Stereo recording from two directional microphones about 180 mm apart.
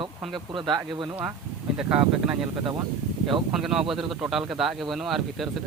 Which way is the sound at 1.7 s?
5° right (ahead or behind).